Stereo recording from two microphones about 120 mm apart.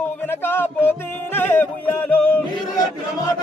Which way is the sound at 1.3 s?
15° left (ahead or behind).